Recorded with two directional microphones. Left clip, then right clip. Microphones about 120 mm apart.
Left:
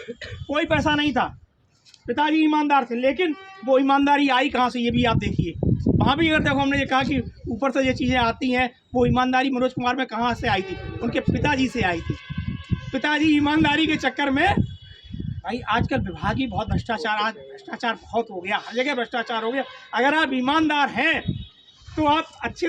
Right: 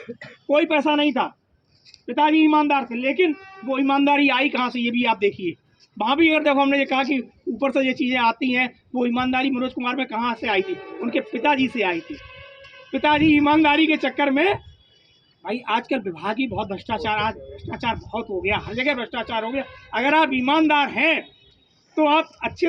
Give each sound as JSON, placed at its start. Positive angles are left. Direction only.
{"t": 0.5, "sound": "a woman's voice", "side_deg": 35}